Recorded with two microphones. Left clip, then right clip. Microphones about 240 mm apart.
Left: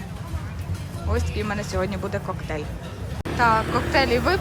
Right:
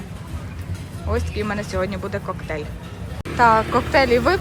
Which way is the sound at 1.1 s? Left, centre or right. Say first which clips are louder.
Right 3 dB; centre.